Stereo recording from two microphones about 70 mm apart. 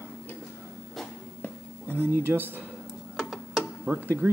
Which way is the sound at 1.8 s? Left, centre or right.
Right.